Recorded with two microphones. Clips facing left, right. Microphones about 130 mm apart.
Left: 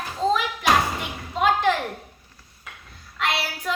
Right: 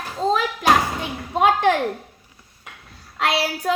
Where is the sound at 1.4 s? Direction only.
65° right (ahead or behind).